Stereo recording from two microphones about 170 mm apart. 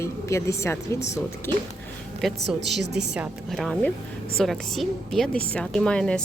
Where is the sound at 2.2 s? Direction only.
Centre (ahead or behind).